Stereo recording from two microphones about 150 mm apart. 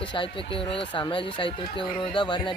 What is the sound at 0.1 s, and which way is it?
Speech, 35° left (ahead or behind).